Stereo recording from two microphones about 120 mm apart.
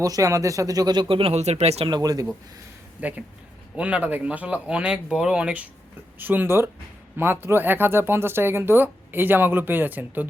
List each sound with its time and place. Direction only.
0.0 s speech: 30° right (ahead or behind); by 1.9 s 60° right (ahead or behind)
1.9 s speech: 30° right (ahead or behind)
3.0 s speech: 15° right (ahead or behind)